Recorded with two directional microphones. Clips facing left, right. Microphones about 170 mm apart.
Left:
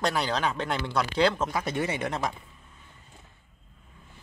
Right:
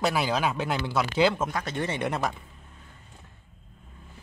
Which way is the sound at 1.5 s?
10° left (ahead or behind).